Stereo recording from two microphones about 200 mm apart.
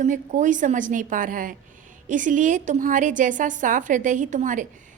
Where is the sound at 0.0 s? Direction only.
40° right (ahead or behind).